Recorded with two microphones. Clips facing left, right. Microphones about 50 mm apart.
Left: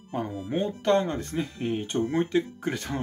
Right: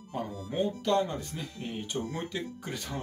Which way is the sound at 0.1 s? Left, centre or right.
Left.